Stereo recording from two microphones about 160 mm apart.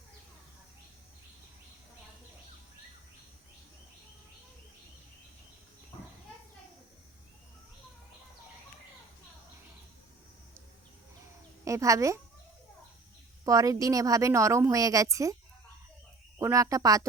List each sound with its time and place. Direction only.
11.6 s speech: 20° right (ahead or behind)
13.4 s speech: 20° right (ahead or behind)
16.4 s speech: 20° right (ahead or behind)